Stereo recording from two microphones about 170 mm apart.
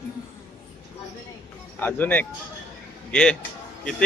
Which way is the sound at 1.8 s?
10° left (ahead or behind).